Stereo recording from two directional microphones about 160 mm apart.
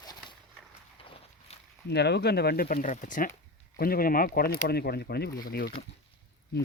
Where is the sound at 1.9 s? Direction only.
90° left; by 3.3 s 55° left (ahead or behind).